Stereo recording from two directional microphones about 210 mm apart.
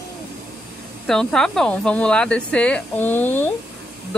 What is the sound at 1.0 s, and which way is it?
Speech, centre (ahead or behind).